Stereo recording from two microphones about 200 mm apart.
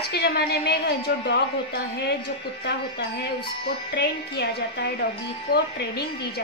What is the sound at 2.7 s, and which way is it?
A woman's voice, 55° left (ahead or behind).